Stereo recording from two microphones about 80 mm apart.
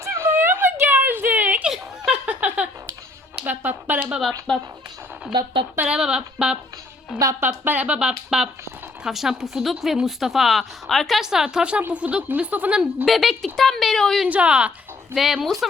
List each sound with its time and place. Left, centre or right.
0.0 s a sound: right
1.6 s giggle: centre
2.2 s a sound: centre
4.1 s speech: centre
5.8 s speech: centre
7.2 s a woman's voice: right
7.4 s speech: right
13.1 s speech: centre
14.3 s speech: centre
15.1 s speech: centre